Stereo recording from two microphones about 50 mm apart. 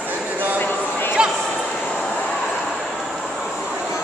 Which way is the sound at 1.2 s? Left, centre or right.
Centre.